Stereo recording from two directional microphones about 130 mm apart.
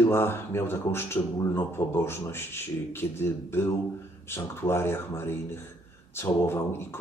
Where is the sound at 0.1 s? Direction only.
20° left (ahead or behind).